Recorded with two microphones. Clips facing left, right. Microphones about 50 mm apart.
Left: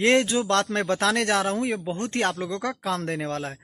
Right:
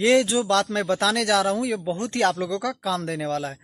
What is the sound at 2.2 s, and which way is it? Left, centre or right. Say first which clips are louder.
Speech: right 5 dB; left.